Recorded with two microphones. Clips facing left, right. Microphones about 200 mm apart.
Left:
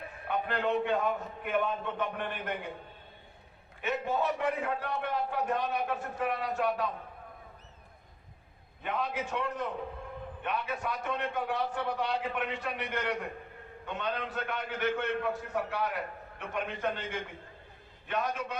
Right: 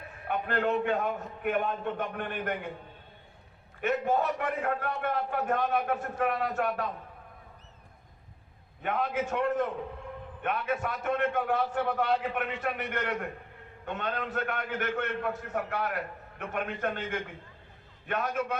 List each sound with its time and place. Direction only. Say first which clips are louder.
0.3 s a sound: right 2 dB; 45° right (ahead or behind)
0.9 s a man's voice: even; 50° right (ahead or behind)
4.0 s a man's voice: right 2 dB; 45° right (ahead or behind)
8.8 s a man's voice: right 4 dB; 50° right (ahead or behind)